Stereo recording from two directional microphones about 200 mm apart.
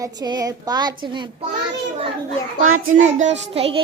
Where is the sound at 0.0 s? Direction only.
20° right (ahead or behind).